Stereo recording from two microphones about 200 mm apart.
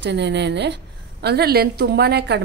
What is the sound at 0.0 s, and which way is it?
A woman's voice, 60° right (ahead or behind).